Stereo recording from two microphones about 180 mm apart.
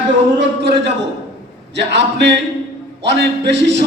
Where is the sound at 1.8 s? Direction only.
75° right (ahead or behind).